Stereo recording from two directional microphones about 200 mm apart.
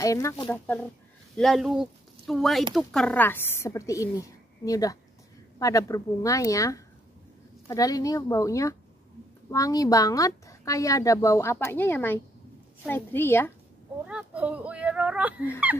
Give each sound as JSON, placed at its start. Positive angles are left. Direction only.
{"t": 0.0, "sound": "a woman's voice", "side_deg": 15}
{"t": 1.3, "sound": "a woman's voice", "side_deg": 0}
{"t": 14.0, "sound": "speech", "side_deg": -5}